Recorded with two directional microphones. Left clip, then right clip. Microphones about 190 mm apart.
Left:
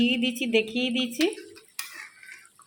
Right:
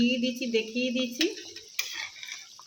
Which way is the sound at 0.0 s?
40° left (ahead or behind).